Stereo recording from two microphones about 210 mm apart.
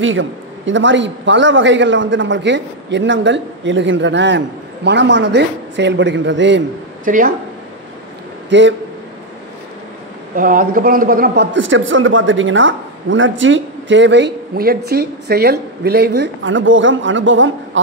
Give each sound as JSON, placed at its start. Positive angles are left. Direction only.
{"t": 0.0, "sound": "a man's voice", "side_deg": -65}
{"t": 7.1, "sound": "speech", "side_deg": -40}
{"t": 8.5, "sound": "a man's voice", "side_deg": -60}
{"t": 10.3, "sound": "a man's voice", "side_deg": -40}